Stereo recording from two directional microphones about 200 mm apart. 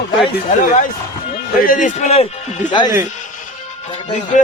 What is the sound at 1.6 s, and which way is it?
Speech, 40° left (ahead or behind).